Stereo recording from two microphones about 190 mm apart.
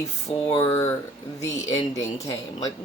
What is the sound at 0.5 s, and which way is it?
Speech, 20° left (ahead or behind).